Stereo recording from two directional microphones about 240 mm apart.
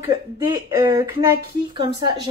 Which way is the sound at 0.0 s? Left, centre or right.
Centre.